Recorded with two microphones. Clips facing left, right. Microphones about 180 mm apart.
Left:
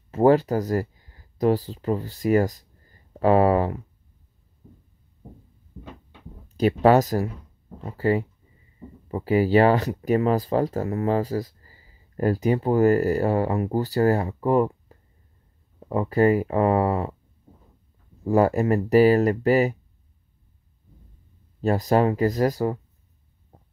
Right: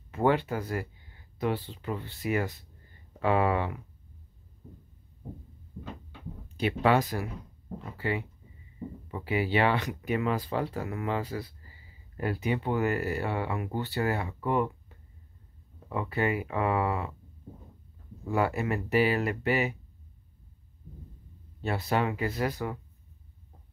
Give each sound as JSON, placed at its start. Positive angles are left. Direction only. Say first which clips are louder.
{"t": 0.1, "sound": "speech", "louder": "left 8 dB", "side_deg": 40}
{"t": 6.5, "sound": "speech", "louder": "left 8 dB", "side_deg": 40}
{"t": 18.2, "sound": "speech", "louder": "left 9 dB", "side_deg": 40}
{"t": 21.5, "sound": "speech", "louder": "left 8 dB", "side_deg": 40}